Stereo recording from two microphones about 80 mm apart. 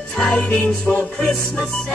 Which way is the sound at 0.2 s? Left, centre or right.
Centre.